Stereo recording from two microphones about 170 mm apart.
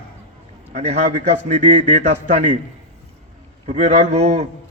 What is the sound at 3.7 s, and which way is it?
Speech, 40° right (ahead or behind).